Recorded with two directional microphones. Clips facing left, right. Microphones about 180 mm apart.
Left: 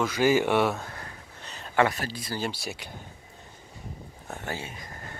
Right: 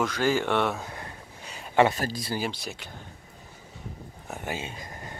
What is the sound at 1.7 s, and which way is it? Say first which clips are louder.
Speech: right 3 dB; 20° right (ahead or behind).